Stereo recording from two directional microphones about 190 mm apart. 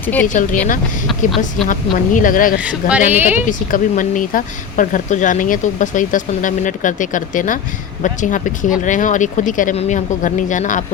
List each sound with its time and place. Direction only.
0.0 s speech: 10° left (ahead or behind)
1.2 s speech: 45° left (ahead or behind)
2.6 s speech: 5° right (ahead or behind)
3.7 s speech: 45° left (ahead or behind)